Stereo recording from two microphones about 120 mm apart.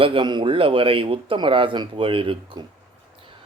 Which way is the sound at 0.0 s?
45° right (ahead or behind).